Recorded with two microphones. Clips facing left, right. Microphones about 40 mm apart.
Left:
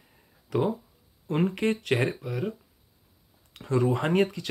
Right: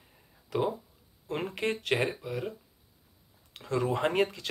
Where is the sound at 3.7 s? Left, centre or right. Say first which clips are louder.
Left 4 dB; centre.